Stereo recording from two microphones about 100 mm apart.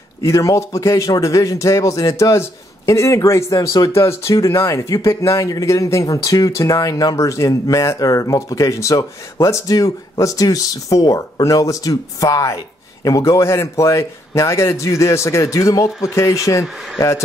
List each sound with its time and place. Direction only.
0.2 s speech: 35° left (ahead or behind)